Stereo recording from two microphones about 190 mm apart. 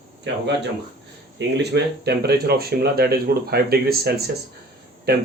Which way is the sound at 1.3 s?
65° right (ahead or behind).